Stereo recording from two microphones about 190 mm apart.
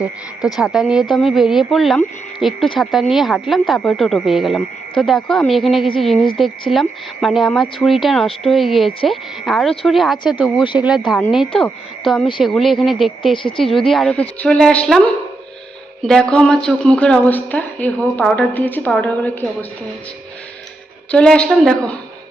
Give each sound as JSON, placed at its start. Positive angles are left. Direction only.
{"t": 0.0, "sound": "speech", "side_deg": 0}
{"t": 10.6, "sound": "speech", "side_deg": 25}
{"t": 11.3, "sound": "a woman's voice", "side_deg": 0}
{"t": 21.1, "sound": "speech", "side_deg": 5}